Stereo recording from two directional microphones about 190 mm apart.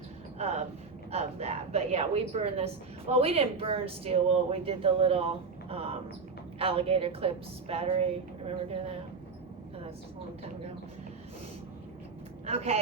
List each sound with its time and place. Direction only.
0.3 s speech: 35° right (ahead or behind)
12.5 s speech: 35° right (ahead or behind)